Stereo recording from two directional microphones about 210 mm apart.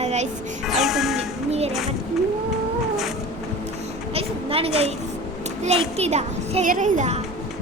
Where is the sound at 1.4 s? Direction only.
30° right (ahead or behind).